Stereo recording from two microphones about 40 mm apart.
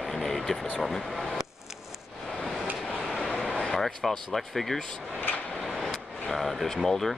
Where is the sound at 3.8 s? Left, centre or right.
Centre.